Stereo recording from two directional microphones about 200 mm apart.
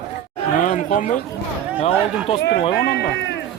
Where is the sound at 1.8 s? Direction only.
30° left (ahead or behind).